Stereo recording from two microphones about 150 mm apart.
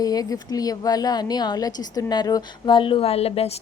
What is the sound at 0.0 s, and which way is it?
A woman's voice, 25° left (ahead or behind).